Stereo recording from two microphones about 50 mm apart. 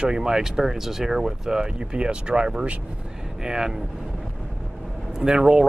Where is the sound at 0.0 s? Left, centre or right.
Centre.